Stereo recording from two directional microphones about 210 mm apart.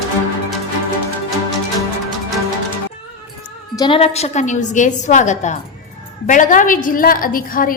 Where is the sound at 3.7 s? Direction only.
20° left (ahead or behind).